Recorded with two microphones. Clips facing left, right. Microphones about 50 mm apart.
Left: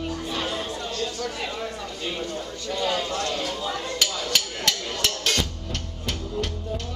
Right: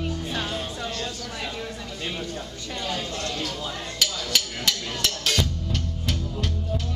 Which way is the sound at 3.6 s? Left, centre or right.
Centre.